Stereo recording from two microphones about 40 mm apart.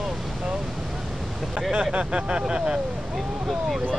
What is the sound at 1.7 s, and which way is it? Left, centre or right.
Speech, right.